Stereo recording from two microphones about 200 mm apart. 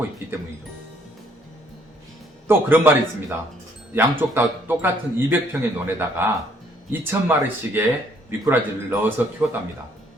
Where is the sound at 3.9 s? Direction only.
10° right (ahead or behind).